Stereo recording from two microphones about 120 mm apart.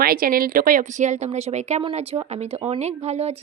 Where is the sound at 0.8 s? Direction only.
80° right.